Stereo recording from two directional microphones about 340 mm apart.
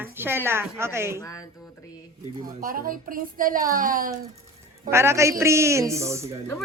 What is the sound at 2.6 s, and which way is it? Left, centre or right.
A woman's voice, right.